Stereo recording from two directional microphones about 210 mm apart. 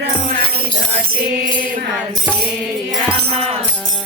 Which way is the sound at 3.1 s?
30° right (ahead or behind).